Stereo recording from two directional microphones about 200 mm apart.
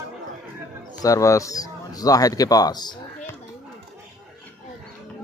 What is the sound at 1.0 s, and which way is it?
Speech, 15° left (ahead or behind).